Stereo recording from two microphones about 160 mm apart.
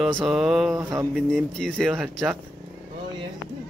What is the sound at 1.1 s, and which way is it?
Speech, centre (ahead or behind).